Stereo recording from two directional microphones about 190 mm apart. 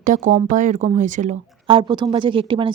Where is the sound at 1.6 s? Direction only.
25° right (ahead or behind).